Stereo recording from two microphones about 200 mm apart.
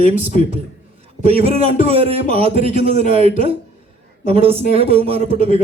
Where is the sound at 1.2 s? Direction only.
30° right (ahead or behind).